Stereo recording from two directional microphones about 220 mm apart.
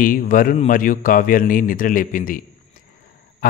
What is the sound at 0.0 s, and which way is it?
A man's voice, 40° left (ahead or behind).